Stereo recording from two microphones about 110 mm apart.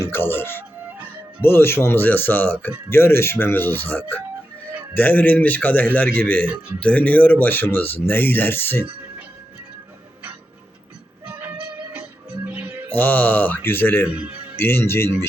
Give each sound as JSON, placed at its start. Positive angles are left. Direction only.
{"t": 0.0, "sound": "speech", "side_deg": 20}
{"t": 11.3, "sound": "music", "side_deg": -15}
{"t": 12.9, "sound": "speech", "side_deg": 15}
{"t": 14.0, "sound": "speech", "side_deg": -10}
{"t": 14.6, "sound": "speech", "side_deg": 20}